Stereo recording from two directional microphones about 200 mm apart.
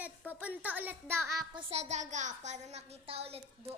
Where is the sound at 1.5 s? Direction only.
30° right (ahead or behind).